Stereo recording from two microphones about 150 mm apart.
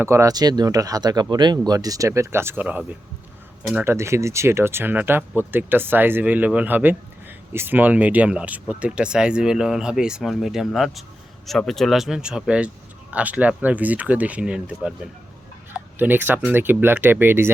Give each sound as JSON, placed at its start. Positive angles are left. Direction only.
{"t": 0.0, "sound": "speech", "side_deg": -20}